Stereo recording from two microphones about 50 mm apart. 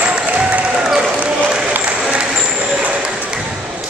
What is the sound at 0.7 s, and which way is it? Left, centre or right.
Basketball bounce, centre.